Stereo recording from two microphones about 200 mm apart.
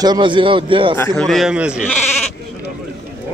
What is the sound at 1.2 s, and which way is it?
Speech, centre (ahead or behind).